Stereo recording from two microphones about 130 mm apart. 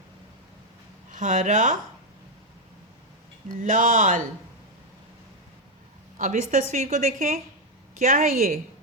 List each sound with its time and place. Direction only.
1.1 s a woman's voice: 70° right (ahead or behind)
3.6 s a woman's voice: 90° right
6.1 s a woman's voice: 75° right (ahead or behind); by 8.5 s 90° right